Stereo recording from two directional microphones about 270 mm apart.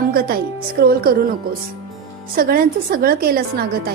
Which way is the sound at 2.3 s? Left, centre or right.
Right.